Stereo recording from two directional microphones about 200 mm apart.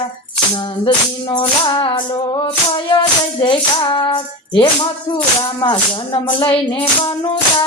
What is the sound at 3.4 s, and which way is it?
Speech, 25° left (ahead or behind).